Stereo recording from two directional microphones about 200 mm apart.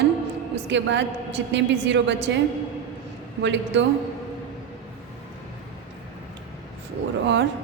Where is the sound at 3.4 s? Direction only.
65° right (ahead or behind).